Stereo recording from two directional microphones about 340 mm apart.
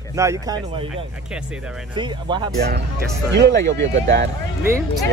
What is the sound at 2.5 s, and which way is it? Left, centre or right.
Speech, right.